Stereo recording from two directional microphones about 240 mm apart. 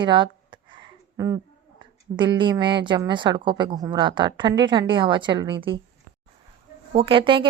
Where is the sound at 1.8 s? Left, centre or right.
Centre.